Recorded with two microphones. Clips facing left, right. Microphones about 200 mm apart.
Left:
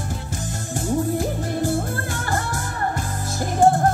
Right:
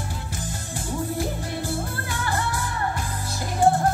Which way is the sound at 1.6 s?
45° left (ahead or behind).